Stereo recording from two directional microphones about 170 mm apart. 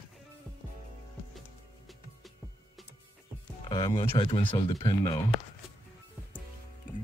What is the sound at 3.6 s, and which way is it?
Speech, 25° left (ahead or behind).